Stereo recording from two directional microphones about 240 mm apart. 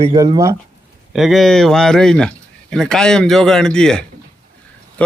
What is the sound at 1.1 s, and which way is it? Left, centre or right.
A man's voice, centre.